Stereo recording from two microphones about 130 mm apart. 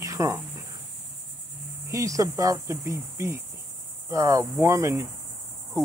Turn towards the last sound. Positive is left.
turn(degrees=-25)  # may be behind; listen again after turning